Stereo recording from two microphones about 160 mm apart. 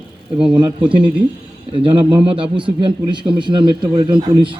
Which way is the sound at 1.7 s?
30° right (ahead or behind).